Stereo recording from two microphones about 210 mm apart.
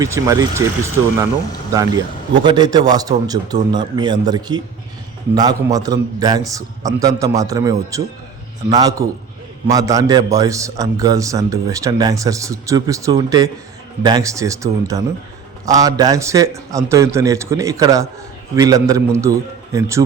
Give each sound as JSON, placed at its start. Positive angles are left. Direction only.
{"t": 0.0, "sound": "a man's voice", "side_deg": -15}
{"t": 1.7, "sound": "a man's voice", "side_deg": -20}